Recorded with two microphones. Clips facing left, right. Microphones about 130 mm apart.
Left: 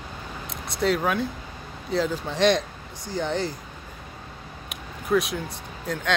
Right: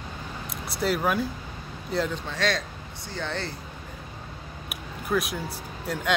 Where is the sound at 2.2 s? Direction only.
20° left (ahead or behind).